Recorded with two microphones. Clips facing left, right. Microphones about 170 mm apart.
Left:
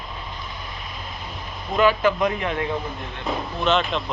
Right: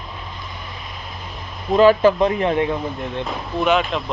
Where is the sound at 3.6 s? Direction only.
5° right (ahead or behind).